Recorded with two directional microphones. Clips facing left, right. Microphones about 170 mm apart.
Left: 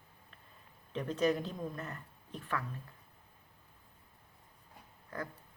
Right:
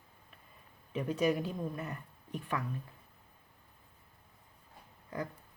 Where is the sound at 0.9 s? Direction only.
10° right (ahead or behind).